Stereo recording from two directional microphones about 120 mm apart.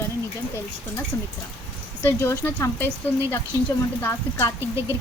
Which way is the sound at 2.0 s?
20° left (ahead or behind).